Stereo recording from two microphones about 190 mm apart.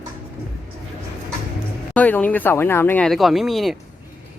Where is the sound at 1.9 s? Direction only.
10° left (ahead or behind).